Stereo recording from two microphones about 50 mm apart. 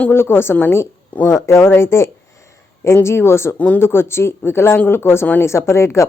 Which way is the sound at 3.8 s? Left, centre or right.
Left.